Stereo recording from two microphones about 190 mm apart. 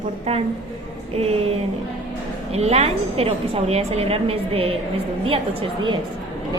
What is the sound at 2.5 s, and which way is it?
A woman's voice, 35° right (ahead or behind).